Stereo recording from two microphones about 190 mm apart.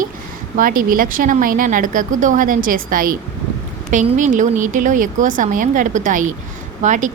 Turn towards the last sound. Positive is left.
turn(degrees=-40)  # may be behind; listen again after turning